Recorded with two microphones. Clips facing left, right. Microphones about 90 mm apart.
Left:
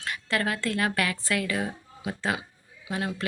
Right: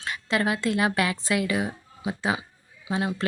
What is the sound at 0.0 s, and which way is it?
Speech, 20° right (ahead or behind).